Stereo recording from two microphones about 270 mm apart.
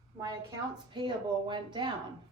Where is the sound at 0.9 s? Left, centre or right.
Centre.